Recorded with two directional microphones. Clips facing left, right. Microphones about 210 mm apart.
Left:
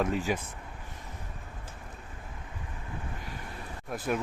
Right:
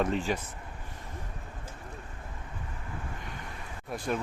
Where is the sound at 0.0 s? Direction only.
10° left (ahead or behind).